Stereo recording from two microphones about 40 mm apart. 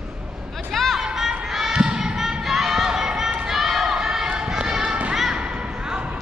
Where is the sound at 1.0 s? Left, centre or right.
Centre.